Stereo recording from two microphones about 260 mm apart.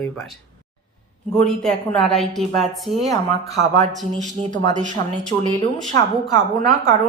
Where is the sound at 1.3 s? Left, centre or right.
Centre.